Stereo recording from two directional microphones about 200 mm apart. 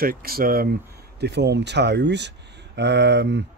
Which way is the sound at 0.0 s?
45° right (ahead or behind).